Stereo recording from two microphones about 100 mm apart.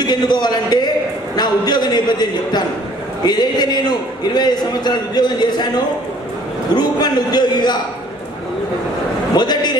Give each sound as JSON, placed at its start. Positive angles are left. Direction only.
{"t": 0.0, "sound": "a man's voice", "side_deg": 45}
{"t": 1.3, "sound": "a sound", "side_deg": 45}
{"t": 3.3, "sound": "a man's voice", "side_deg": 45}
{"t": 6.8, "sound": "a man's voice", "side_deg": 45}
{"t": 9.3, "sound": "a man's voice", "side_deg": 45}